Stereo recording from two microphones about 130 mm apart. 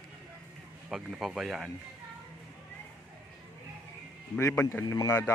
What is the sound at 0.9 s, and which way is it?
Speech, 5° right (ahead or behind).